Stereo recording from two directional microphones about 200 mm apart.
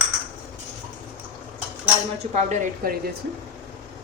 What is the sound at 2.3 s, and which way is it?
Speech, 35° right (ahead or behind).